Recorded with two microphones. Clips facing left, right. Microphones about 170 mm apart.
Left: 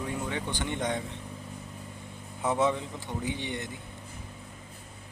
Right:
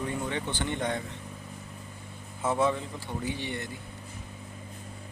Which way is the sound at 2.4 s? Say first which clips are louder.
Even; 20° left (ahead or behind).